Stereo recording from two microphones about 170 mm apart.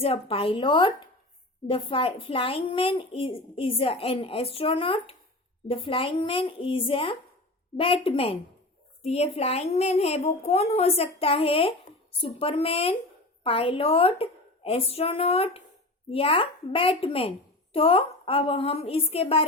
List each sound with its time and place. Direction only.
0.0 s a child's voice: 35° left (ahead or behind)